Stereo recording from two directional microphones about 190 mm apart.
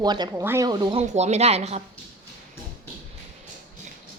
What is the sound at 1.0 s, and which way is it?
Speech, 35° right (ahead or behind).